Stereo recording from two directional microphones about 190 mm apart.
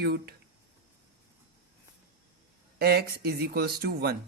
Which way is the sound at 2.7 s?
55° right (ahead or behind).